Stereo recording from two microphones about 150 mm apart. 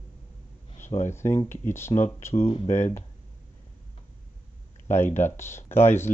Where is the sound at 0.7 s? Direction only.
55° left (ahead or behind).